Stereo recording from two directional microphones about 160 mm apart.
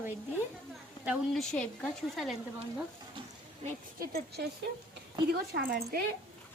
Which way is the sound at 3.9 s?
80° right.